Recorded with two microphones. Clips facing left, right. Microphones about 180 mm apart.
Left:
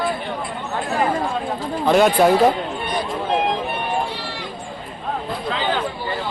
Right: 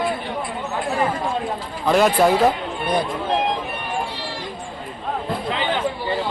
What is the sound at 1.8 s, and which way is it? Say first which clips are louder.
Speech: left 1 dB; centre (ahead or behind).